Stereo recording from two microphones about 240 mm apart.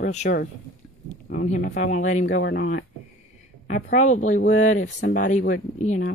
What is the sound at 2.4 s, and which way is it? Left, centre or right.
Speech, left.